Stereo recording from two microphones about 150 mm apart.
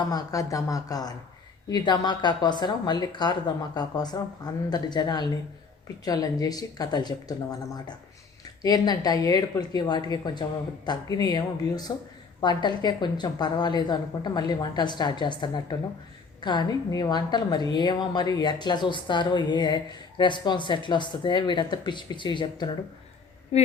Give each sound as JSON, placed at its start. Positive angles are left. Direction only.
{"t": 0.1, "sound": "a woman's voice", "side_deg": 20}
{"t": 8.6, "sound": "a woman's voice", "side_deg": 25}
{"t": 23.5, "sound": "a woman's voice", "side_deg": 45}